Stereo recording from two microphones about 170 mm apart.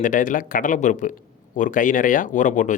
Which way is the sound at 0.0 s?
50° left (ahead or behind).